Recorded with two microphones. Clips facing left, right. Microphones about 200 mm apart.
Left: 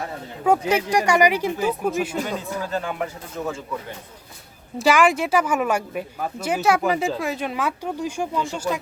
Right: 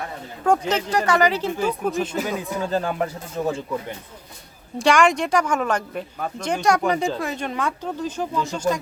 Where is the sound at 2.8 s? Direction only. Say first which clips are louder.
Right 3 dB; 40° right (ahead or behind).